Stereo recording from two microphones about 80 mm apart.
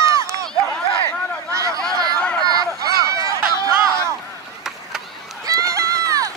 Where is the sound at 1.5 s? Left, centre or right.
Right.